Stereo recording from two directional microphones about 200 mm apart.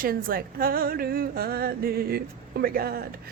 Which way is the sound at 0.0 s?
45° right (ahead or behind).